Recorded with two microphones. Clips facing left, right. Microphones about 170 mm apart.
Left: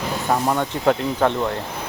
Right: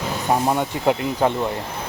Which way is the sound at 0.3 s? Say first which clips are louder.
Right 1 dB; 15° right (ahead or behind).